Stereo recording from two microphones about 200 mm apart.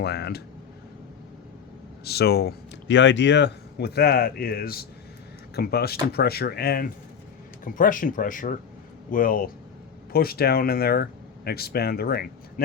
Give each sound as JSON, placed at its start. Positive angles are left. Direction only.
{"t": 0.0, "sound": "speech", "side_deg": 55}
{"t": 2.0, "sound": "speech", "side_deg": 55}